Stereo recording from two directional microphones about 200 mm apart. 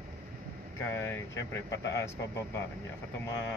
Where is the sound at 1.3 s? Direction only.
60° left (ahead or behind).